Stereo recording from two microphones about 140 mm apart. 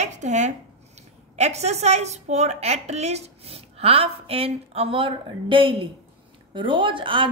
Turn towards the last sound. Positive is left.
turn(degrees=-35)  # may be behind; listen again after turning